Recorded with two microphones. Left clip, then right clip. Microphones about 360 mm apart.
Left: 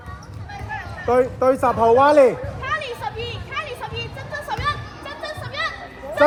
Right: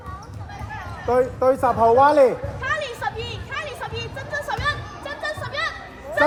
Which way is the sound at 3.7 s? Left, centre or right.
Right.